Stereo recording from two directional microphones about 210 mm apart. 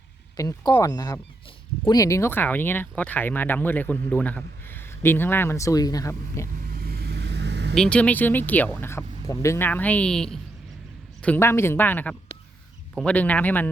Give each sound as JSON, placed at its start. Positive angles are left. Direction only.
{"t": 0.3, "sound": "speech", "side_deg": 15}
{"t": 6.7, "sound": "vehicle", "side_deg": -45}
{"t": 7.8, "sound": "speech", "side_deg": 5}